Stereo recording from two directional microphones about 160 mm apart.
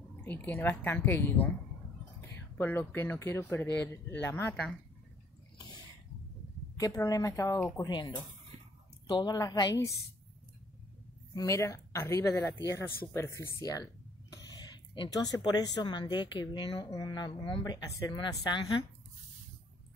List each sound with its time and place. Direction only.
0.2 s speech: 10° left (ahead or behind)
6.8 s speech: 20° left (ahead or behind)
9.0 s speech: 25° left (ahead or behind)
11.3 s speech: 20° left (ahead or behind)